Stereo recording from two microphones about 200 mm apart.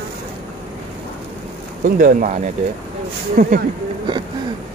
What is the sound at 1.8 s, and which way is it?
Speech, 40° right (ahead or behind).